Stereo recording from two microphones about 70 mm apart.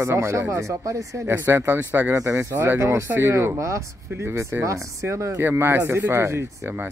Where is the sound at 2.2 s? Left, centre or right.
Right.